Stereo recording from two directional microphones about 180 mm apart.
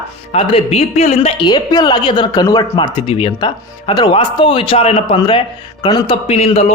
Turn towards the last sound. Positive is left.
turn(degrees=35)  # may be behind; listen again after turning